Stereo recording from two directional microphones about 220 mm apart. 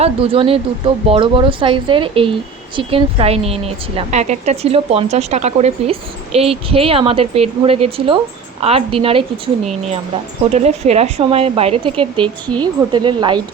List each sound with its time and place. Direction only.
0.0 s a woman's voice: 25° right (ahead or behind)